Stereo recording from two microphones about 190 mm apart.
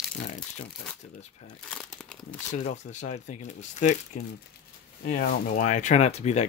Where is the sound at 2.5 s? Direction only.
40° left (ahead or behind).